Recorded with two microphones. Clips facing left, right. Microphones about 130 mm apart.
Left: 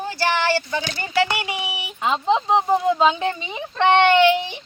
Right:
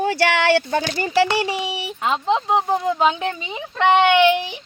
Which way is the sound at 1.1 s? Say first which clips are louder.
Right 3 dB; 35° right (ahead or behind).